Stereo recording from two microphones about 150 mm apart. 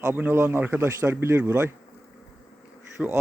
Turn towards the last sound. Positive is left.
turn(degrees=-10)  # may be behind; listen again after turning